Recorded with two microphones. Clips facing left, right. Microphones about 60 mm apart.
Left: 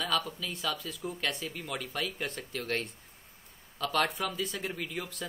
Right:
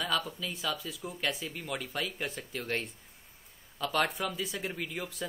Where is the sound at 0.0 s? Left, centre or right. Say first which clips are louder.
Left 1 dB; centre.